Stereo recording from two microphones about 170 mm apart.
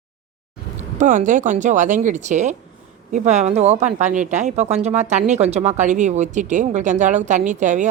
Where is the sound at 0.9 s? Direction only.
45° right (ahead or behind).